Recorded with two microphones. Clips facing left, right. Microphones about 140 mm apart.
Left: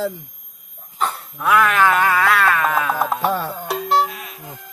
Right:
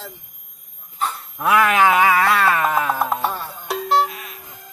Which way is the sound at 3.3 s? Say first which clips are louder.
Left 7 dB; 90° left.